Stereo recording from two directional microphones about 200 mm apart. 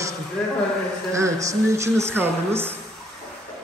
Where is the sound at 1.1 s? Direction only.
15° right (ahead or behind).